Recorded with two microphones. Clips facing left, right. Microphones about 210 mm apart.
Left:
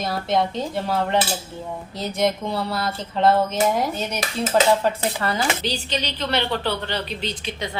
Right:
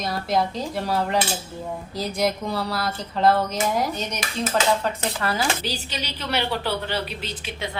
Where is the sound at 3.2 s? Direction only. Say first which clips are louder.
Left 1 dB; 25° left (ahead or behind).